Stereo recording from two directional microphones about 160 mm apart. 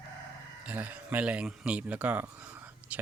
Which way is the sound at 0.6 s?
10° right (ahead or behind).